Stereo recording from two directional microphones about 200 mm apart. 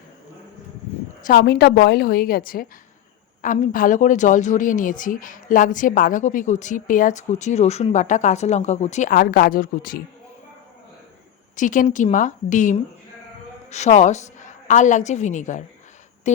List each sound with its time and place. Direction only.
1.2 s a woman's voice: 50° left (ahead or behind)
11.5 s a woman's voice: 40° left (ahead or behind)